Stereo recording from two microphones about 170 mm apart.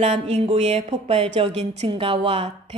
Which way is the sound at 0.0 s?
35° right (ahead or behind).